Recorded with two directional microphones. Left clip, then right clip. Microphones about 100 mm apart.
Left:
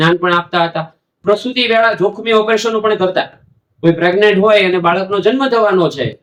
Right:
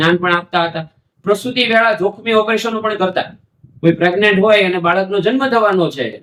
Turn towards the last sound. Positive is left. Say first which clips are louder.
# left 2 dB
turn(degrees=15)  # may be behind; listen again after turning